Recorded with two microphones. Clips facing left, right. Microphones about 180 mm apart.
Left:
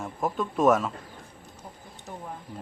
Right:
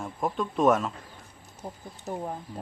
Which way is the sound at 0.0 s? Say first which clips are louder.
Even; centre (ahead or behind).